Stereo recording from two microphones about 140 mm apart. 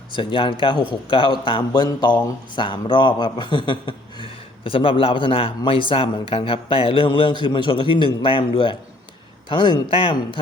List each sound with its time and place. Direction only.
0.2 s speech: 35° left (ahead or behind)